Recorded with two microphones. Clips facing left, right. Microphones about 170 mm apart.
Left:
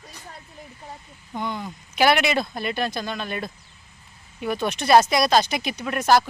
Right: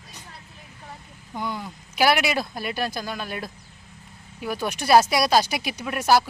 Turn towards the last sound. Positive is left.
turn(degrees=-10)  # may be behind; listen again after turning